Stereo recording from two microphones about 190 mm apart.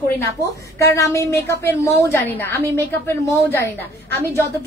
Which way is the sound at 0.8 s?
15° left (ahead or behind).